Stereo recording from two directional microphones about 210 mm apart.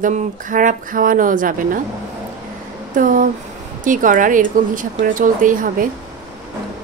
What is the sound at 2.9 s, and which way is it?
A woman's voice, 40° right (ahead or behind).